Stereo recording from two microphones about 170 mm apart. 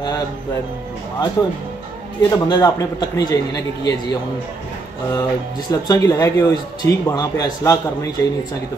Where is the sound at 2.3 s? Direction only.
20° left (ahead or behind).